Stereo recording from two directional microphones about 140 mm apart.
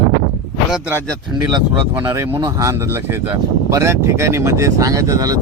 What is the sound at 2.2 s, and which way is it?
Speech, 20° right (ahead or behind).